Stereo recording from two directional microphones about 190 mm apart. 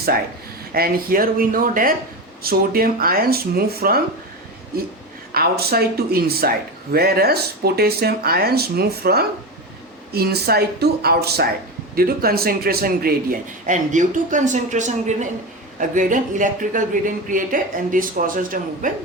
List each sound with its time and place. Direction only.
0.7 s speech: 50° right (ahead or behind)
5.3 s speech: 55° right (ahead or behind)